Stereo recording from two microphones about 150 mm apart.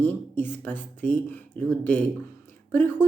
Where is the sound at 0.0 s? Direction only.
10° left (ahead or behind).